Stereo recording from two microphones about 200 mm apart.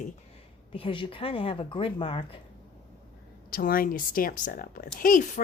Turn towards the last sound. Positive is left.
turn(degrees=40)  # may be behind; listen again after turning